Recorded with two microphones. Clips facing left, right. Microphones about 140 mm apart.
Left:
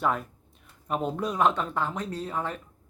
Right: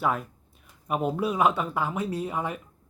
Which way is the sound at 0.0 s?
5° right (ahead or behind).